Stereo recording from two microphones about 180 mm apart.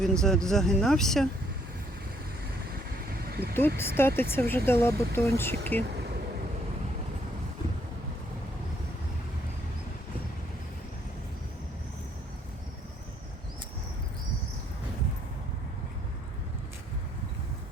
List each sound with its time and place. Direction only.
0.0 s speech: 5° left (ahead or behind)
3.1 s a sound: 60° right (ahead or behind)
3.8 s speech: 10° left (ahead or behind)